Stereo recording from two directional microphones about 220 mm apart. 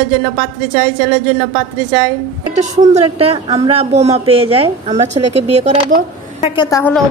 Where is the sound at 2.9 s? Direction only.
25° right (ahead or behind).